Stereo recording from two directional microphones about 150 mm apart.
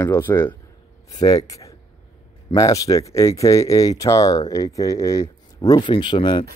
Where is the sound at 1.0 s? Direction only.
25° left (ahead or behind).